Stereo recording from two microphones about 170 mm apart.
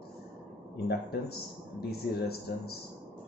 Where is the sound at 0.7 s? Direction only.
70° left (ahead or behind).